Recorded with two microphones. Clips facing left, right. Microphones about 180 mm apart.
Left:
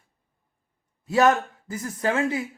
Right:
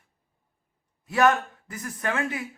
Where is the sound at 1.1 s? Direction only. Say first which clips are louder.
Left 2 dB; 25° left (ahead or behind).